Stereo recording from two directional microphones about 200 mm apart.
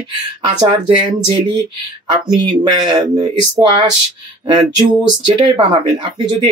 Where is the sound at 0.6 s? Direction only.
25° right (ahead or behind).